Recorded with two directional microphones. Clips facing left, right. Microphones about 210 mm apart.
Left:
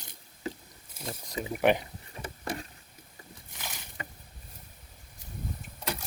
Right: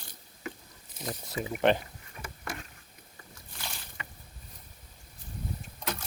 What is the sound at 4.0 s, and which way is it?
Boat, 45° left (ahead or behind).